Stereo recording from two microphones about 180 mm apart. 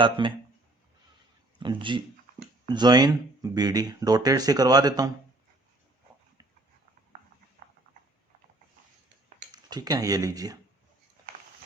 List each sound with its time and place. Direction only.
0.0 s speech: 25° right (ahead or behind)
1.5 s speech: 25° right (ahead or behind)
9.5 s speech: 20° right (ahead or behind)